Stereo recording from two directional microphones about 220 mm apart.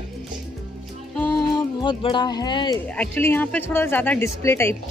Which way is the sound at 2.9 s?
10° left (ahead or behind).